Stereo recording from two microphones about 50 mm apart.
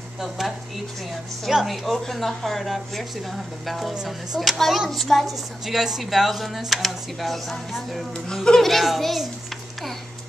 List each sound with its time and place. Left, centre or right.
1.5 s a woman's voice: centre
3.9 s speech: centre
4.4 s a woman's voice: centre
8.3 s a woman's voice: centre